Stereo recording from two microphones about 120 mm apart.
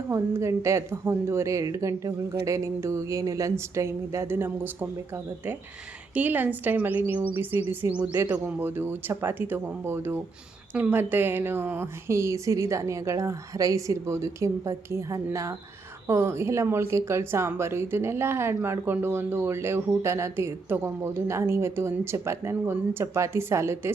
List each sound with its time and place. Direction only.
0.1 s speech: 25° right (ahead or behind)